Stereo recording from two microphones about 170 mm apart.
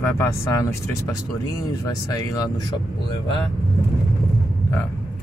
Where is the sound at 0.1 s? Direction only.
15° left (ahead or behind).